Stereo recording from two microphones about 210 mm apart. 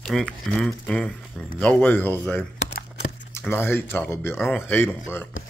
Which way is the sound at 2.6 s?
55° left (ahead or behind).